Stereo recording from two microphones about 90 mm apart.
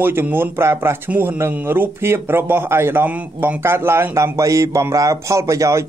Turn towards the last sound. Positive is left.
turn(degrees=-35)  # may be behind; listen again after turning